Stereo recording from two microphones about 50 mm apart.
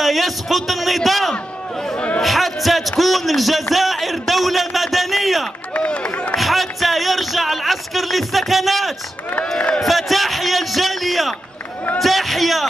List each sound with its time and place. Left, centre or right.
0.0 s a man's voice: centre
1.3 s a sound: centre
2.2 s a man's voice: centre
5.7 s speech: left
6.3 s a sound: centre
9.4 s speech: centre
9.8 s a man's voice: centre